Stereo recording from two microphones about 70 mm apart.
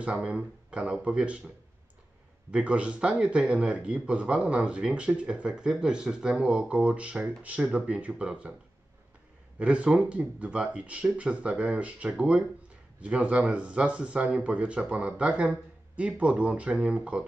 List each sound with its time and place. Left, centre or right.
0.1 s a man's voice: centre
2.5 s a man's voice: centre
9.6 s a man's voice: centre